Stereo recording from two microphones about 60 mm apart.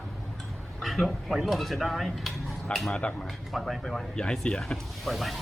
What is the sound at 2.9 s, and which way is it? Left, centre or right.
Speech, centre.